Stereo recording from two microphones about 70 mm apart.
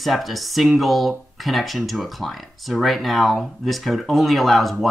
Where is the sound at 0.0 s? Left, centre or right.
Centre.